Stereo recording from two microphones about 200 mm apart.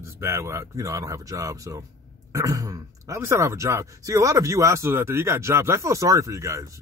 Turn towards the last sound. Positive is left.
turn(degrees=-15)  # may be behind; listen again after turning